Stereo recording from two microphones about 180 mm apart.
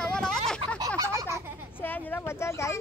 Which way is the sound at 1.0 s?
15° right (ahead or behind).